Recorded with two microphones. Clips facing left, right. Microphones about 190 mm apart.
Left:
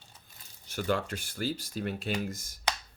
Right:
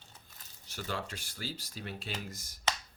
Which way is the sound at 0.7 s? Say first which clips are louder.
Left 8 dB; 55° left (ahead or behind).